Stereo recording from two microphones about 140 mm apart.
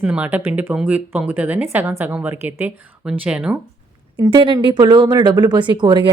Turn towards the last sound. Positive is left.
turn(degrees=-35)  # may be behind; listen again after turning